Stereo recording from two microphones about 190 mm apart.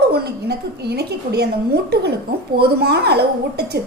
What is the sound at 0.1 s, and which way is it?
A woman's voice, 60° right (ahead or behind).